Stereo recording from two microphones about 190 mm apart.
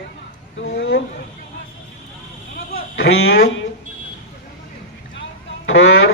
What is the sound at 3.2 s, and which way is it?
Speech, 90° left.